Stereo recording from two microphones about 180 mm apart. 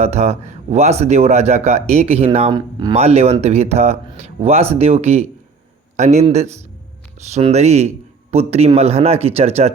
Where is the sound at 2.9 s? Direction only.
35° right (ahead or behind).